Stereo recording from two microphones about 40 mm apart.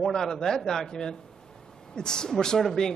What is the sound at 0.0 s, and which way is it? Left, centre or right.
A man's voice, centre.